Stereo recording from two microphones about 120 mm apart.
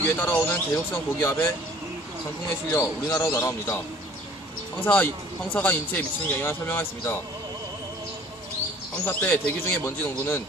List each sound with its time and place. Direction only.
0.2 s speech: 20° left (ahead or behind)
2.7 s speech: 20° left (ahead or behind)
4.8 s speech: 15° left (ahead or behind)
9.0 s speech: 20° left (ahead or behind)